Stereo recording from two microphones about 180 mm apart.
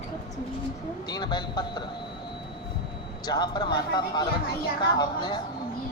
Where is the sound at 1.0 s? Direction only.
25° left (ahead or behind).